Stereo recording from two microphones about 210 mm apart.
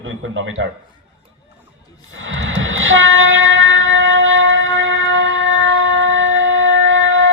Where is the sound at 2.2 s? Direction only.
65° right (ahead or behind).